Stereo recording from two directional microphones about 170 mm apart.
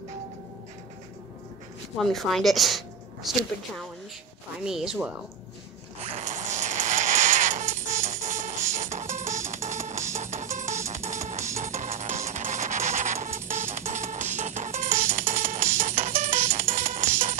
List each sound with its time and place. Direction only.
2.0 s speech: centre (ahead or behind)
6.1 s a sound: 45° right (ahead or behind)
9.5 s music: 45° right (ahead or behind)